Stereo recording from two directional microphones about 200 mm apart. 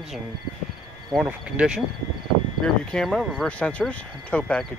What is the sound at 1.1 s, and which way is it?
Speech, 5° right (ahead or behind).